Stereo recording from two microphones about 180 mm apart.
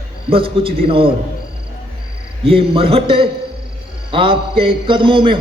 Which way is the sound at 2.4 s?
30° right (ahead or behind).